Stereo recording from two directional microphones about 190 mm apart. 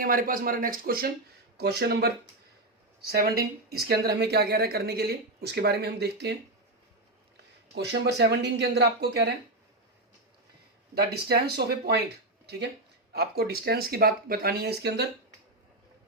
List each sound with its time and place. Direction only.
0.0 s speech: 50° right (ahead or behind)
7.8 s speech: 60° right (ahead or behind)
10.9 s speech: 55° right (ahead or behind)